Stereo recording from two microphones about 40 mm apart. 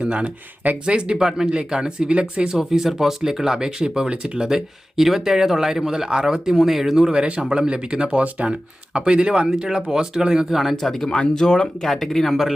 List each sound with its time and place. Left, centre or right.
0.0 s speech: right
1.2 s speech: centre; by 2.6 s right
2.6 s speech: centre
7.1 s speech: right
10.8 s speech: centre
11.9 s speech: centre